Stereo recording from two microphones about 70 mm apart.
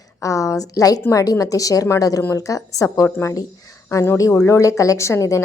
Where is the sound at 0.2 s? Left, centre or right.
Left.